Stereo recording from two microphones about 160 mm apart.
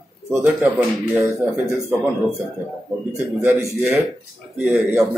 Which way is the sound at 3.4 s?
15° right (ahead or behind).